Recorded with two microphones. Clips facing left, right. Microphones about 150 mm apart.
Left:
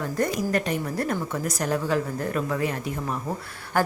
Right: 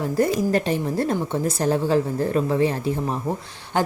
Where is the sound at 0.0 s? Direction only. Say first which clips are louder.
Right 5 dB; 30° right (ahead or behind).